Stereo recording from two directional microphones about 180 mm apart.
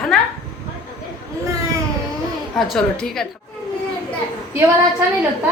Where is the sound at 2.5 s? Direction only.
Centre (ahead or behind).